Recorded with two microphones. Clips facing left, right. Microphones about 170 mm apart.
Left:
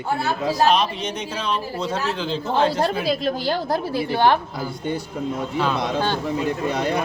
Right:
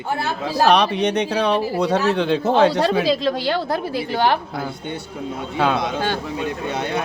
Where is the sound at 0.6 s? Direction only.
70° right (ahead or behind).